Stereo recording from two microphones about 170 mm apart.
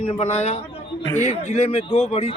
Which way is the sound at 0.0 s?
35° left (ahead or behind).